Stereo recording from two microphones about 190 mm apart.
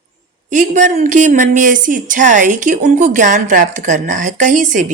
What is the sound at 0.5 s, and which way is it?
A woman's voice, 40° right (ahead or behind).